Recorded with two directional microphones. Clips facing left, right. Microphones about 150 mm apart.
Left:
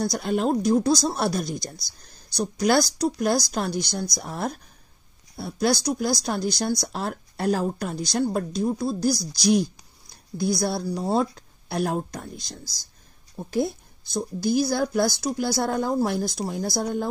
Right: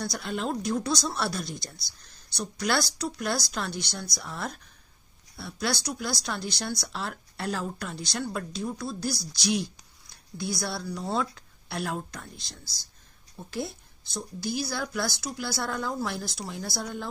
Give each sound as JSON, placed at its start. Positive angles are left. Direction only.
{"t": 0.0, "sound": "a woman's voice", "side_deg": 45}